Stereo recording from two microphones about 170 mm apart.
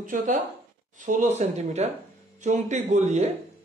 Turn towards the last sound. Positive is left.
turn(degrees=-45)  # may be behind; listen again after turning